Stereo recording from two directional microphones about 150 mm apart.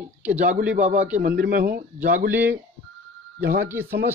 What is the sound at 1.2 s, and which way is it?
Speech, 85° right.